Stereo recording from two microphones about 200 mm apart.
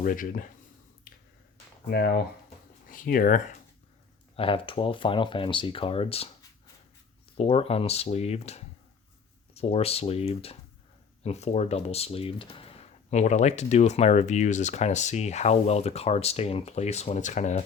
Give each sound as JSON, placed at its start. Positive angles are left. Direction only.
{"t": 0.0, "sound": "speech", "side_deg": 45}
{"t": 1.9, "sound": "speech", "side_deg": 50}
{"t": 4.4, "sound": "speech", "side_deg": 25}
{"t": 7.3, "sound": "speech", "side_deg": 30}